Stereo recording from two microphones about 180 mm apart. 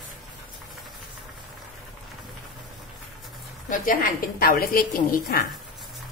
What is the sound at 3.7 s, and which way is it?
A woman's voice, 50° left (ahead or behind).